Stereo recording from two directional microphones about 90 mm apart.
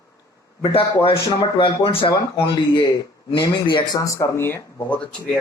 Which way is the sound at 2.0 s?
55° left (ahead or behind).